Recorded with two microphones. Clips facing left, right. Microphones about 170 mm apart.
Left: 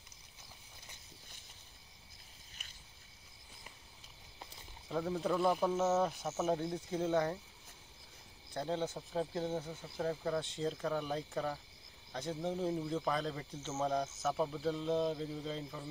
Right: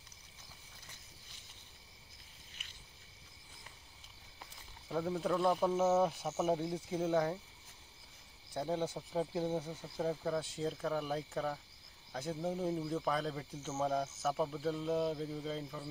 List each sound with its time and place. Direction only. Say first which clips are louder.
4.8 s speech: even; centre (ahead or behind)
8.5 s speech: right 1 dB; 10° right (ahead or behind)
9.9 s speech: even; centre (ahead or behind)